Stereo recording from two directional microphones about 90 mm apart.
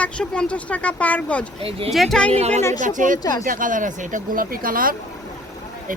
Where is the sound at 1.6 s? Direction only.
90° right.